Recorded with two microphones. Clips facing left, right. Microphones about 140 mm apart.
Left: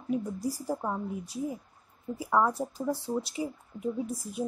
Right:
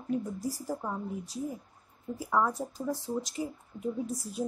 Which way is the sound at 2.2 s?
10° left (ahead or behind).